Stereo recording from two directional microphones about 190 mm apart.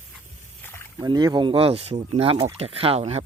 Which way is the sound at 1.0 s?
20° right (ahead or behind).